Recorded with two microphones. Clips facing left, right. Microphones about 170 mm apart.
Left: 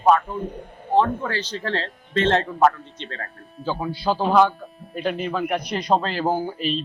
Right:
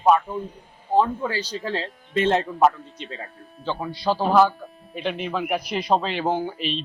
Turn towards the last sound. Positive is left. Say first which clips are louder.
# left 2 dB
turn(degrees=0)  # may be behind; listen again after turning